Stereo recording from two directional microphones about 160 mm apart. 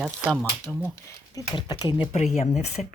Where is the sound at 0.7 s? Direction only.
5° left (ahead or behind).